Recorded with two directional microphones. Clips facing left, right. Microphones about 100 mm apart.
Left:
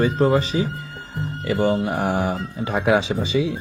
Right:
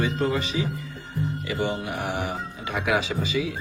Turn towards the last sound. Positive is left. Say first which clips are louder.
# left 5 dB
turn(degrees=25)  # may be behind; listen again after turning